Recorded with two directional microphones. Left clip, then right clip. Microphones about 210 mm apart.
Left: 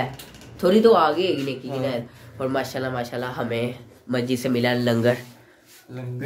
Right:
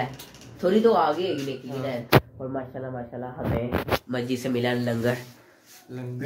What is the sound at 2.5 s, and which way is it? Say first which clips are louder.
Speech: left 7 dB; 25° left (ahead or behind).